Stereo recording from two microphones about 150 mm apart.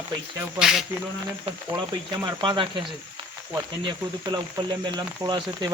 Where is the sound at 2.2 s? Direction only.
30° right (ahead or behind).